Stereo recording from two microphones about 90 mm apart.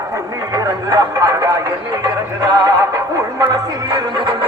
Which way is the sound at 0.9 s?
40° right (ahead or behind).